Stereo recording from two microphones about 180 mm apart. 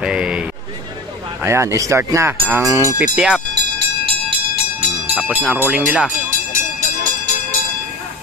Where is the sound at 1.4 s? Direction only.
15° right (ahead or behind).